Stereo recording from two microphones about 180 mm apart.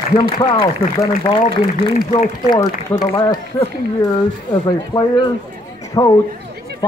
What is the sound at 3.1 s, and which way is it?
Speech, 30° left (ahead or behind).